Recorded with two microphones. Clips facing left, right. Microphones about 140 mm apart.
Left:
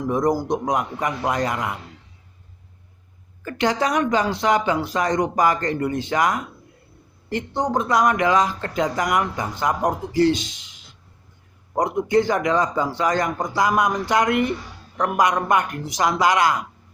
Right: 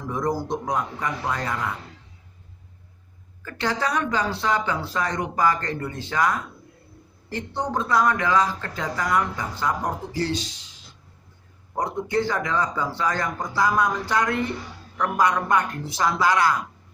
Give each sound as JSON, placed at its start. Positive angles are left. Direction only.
{"t": 0.1, "sound": "speech", "side_deg": 20}
{"t": 3.4, "sound": "speech", "side_deg": 20}
{"t": 11.8, "sound": "speech", "side_deg": 20}